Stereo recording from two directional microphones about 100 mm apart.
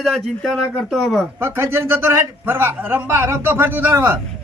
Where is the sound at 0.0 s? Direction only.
Centre (ahead or behind).